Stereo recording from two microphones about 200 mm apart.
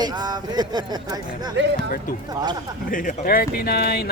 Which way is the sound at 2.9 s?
45° left (ahead or behind).